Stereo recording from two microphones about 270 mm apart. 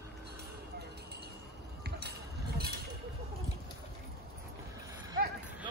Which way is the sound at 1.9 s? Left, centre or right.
Right.